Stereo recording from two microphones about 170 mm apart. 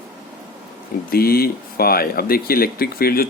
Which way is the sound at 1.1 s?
65° left (ahead or behind).